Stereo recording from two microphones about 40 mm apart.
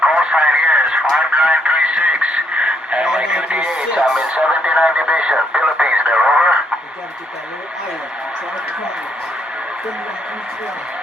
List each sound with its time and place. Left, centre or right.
0.0 s radio: right
3.2 s speech: right